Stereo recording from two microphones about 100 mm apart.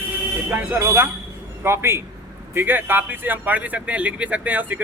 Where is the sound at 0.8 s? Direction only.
30° right (ahead or behind).